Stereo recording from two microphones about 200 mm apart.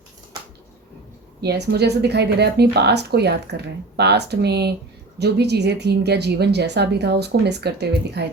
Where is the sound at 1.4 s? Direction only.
55° right (ahead or behind).